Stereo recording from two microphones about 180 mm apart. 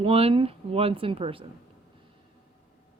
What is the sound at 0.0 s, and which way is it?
Speech, 30° right (ahead or behind).